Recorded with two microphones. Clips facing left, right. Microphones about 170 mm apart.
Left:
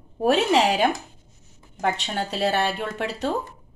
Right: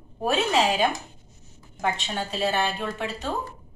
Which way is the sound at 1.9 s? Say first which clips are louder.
Left 2 dB; 70° left (ahead or behind).